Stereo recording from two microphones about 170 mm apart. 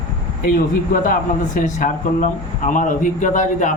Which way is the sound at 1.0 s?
50° left (ahead or behind).